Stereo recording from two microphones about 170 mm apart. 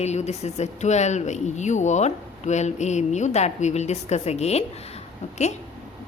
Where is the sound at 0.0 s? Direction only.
40° left (ahead or behind).